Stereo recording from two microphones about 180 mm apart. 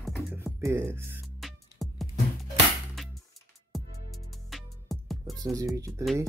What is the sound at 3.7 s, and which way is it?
Music, centre (ahead or behind).